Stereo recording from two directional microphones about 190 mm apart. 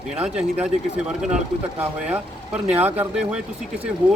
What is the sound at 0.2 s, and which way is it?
Speech, 5° right (ahead or behind).